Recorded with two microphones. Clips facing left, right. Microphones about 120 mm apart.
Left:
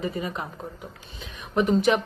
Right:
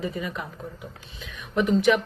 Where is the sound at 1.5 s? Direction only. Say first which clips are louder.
Even; 35° left (ahead or behind).